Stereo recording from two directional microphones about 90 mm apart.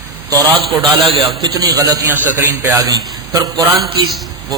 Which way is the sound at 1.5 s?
40° right (ahead or behind).